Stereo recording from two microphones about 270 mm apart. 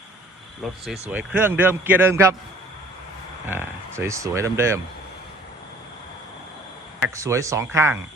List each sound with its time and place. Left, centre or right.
0.6 s speech: centre
3.5 s speech: centre
7.0 s speech: centre